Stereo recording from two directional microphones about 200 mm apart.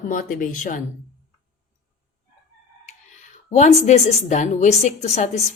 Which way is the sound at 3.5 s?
35° left (ahead or behind).